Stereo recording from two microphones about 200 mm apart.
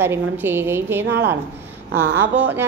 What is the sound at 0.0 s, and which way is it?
Speech, 10° right (ahead or behind).